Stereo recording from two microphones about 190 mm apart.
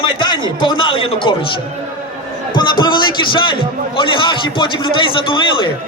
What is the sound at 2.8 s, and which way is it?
A man's voice, 25° left (ahead or behind).